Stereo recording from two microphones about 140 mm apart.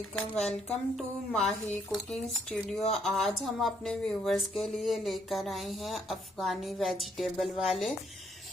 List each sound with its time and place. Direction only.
0.7 s speech: centre (ahead or behind)